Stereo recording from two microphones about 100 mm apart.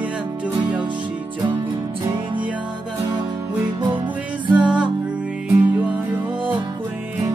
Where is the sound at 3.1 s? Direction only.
50° right (ahead or behind).